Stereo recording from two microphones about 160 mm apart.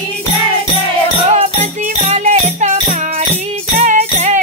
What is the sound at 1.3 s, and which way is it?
Music, 40° right (ahead or behind).